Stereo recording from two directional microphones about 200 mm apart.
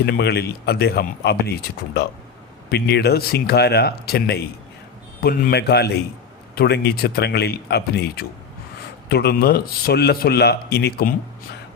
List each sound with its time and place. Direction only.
0.0 s speech: 55° left (ahead or behind)
2.6 s a man's voice: 55° left (ahead or behind)